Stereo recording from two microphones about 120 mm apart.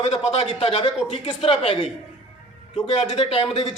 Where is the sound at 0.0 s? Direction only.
60° left (ahead or behind).